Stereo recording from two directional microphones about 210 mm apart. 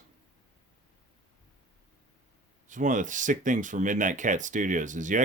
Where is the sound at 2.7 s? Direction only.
35° right (ahead or behind).